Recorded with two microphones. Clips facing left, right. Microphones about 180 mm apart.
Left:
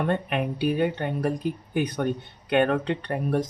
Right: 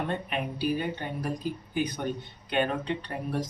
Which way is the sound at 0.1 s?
60° left (ahead or behind).